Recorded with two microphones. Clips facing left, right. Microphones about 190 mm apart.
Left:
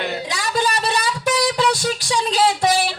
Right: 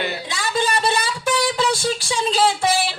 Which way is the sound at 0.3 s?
25° right (ahead or behind).